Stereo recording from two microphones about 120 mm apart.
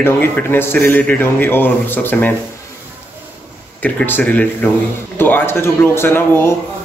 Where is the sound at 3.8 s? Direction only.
15° left (ahead or behind).